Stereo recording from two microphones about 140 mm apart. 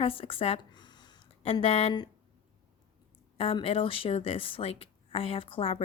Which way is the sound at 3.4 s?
40° left (ahead or behind).